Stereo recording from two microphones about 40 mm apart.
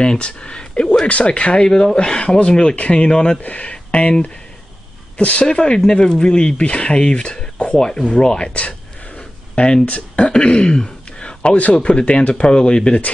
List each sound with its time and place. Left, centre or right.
0.0 s a sound: left
1.0 s speech: left
3.4 s speech: left
3.7 s speech: left
8.5 s a sound: left
9.8 s speech: left